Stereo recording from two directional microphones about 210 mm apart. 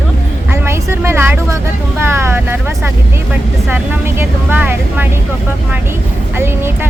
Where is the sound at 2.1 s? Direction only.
10° right (ahead or behind).